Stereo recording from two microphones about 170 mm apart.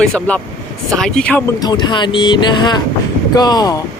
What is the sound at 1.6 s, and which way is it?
Speech, 25° left (ahead or behind).